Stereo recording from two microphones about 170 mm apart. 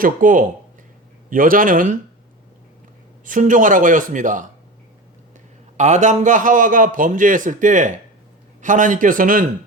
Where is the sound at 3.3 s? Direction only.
50° right (ahead or behind).